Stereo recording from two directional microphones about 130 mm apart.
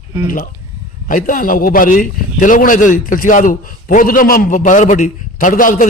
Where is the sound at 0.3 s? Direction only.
90° left.